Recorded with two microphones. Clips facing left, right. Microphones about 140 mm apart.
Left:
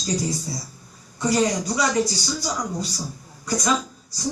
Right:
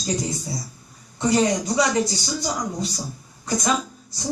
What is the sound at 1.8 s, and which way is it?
A man's voice, 25° right (ahead or behind).